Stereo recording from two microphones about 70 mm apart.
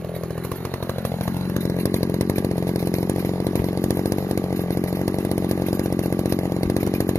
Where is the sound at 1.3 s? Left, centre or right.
Left.